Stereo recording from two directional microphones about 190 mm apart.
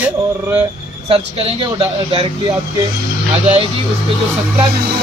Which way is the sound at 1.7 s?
30° right (ahead or behind).